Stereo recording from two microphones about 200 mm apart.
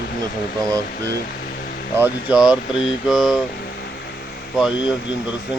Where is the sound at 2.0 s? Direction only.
5° right (ahead or behind).